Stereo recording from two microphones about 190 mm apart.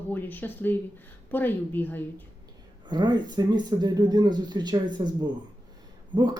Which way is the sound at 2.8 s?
20° right (ahead or behind).